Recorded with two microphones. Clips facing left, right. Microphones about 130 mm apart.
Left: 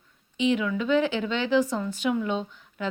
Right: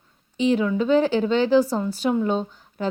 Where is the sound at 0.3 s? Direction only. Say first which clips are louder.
Right 4 dB; 35° right (ahead or behind).